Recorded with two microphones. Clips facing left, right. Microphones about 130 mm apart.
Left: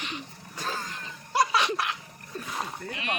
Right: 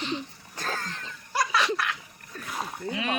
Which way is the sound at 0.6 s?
10° left (ahead or behind).